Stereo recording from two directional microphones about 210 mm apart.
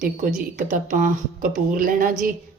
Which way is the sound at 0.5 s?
35° right (ahead or behind).